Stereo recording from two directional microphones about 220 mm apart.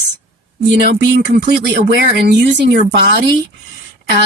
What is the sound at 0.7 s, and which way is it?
Speech, 50° right (ahead or behind).